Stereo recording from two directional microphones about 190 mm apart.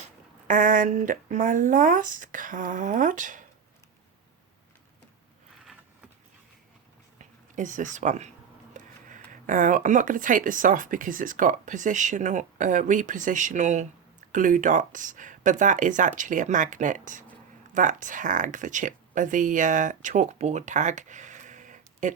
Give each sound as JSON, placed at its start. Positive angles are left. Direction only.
{"t": 0.0, "sound": "speech", "side_deg": -45}
{"t": 7.2, "sound": "a woman's voice", "side_deg": -40}
{"t": 8.7, "sound": "a sound", "side_deg": -45}
{"t": 9.3, "sound": "speech", "side_deg": -45}